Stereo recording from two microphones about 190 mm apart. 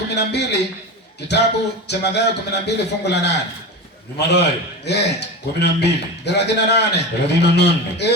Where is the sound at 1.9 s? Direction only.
60° left (ahead or behind).